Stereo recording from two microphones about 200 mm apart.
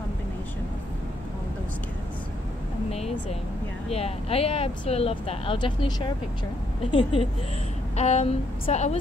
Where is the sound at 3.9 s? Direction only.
30° left (ahead or behind).